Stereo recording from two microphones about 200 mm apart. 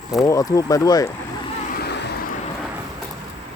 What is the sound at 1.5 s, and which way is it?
Vehicle, 45° left (ahead or behind).